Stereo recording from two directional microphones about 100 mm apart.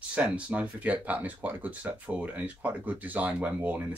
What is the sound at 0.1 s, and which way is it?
Speech, 15° right (ahead or behind).